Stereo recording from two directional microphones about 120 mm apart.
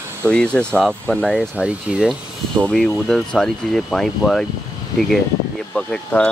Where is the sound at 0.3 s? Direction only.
10° left (ahead or behind).